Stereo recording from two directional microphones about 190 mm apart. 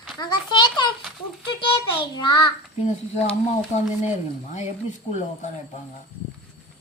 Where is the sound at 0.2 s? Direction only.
25° left (ahead or behind).